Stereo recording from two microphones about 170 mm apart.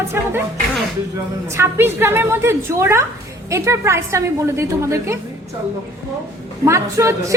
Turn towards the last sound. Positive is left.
turn(degrees=-15)  # may be behind; listen again after turning